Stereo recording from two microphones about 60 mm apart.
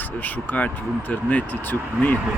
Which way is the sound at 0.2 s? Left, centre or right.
Left.